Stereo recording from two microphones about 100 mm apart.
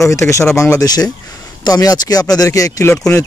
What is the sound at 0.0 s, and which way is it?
Speech, 30° left (ahead or behind).